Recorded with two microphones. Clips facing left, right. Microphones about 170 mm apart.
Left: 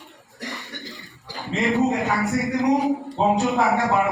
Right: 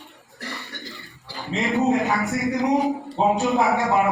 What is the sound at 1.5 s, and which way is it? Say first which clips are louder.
Speech: even; centre (ahead or behind).